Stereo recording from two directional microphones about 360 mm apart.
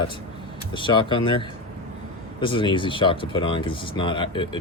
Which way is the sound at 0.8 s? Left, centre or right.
Centre.